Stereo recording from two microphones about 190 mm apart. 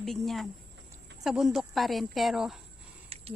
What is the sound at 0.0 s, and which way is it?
Speech, centre (ahead or behind).